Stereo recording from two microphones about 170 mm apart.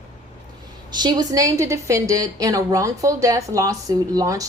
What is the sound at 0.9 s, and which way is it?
A woman's voice, 25° right (ahead or behind).